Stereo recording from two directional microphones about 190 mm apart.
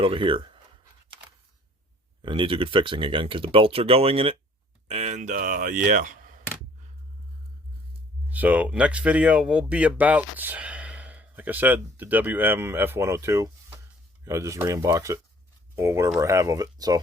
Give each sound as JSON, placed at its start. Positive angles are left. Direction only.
{"t": 0.0, "sound": "speech", "side_deg": -30}
{"t": 2.2, "sound": "speech", "side_deg": -25}
{"t": 8.3, "sound": "speech", "side_deg": -10}